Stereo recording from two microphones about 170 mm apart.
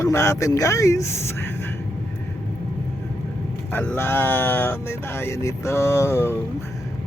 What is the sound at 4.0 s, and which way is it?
Speech, 15° left (ahead or behind).